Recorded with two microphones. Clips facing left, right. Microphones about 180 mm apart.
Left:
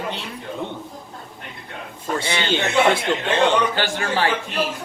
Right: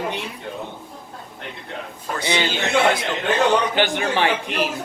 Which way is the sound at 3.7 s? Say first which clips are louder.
Right 2 dB; 20° right (ahead or behind).